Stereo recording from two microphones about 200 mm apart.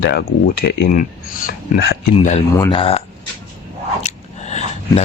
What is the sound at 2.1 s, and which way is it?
Speech, 35° left (ahead or behind).